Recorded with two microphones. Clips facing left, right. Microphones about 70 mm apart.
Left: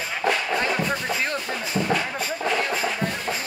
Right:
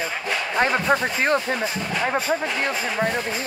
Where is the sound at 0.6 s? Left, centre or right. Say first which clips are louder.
Right 5 dB; right.